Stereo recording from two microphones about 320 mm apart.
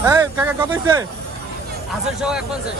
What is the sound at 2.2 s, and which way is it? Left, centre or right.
Speech, centre.